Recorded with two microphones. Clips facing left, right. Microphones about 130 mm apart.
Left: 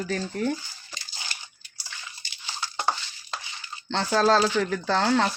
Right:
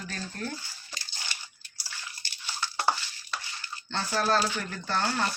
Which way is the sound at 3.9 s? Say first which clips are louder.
Left 6 dB; 85° left.